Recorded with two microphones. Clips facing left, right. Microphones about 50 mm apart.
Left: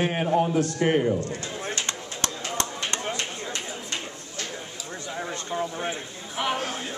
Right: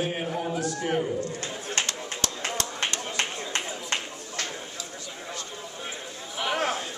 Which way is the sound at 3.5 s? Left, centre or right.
Right.